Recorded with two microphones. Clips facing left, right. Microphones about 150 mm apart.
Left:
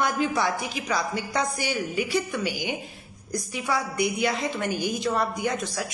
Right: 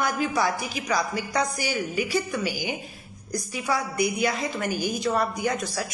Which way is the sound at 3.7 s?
20° left (ahead or behind).